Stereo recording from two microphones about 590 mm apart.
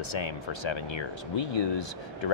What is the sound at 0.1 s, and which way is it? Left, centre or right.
Speech, left.